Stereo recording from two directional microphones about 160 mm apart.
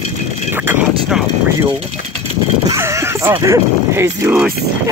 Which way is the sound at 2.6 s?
20° right (ahead or behind).